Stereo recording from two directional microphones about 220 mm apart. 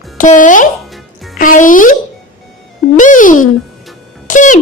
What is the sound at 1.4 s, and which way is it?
Speech, 35° left (ahead or behind).